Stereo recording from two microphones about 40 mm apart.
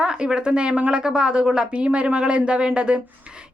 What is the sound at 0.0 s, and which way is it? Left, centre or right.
Speech, right.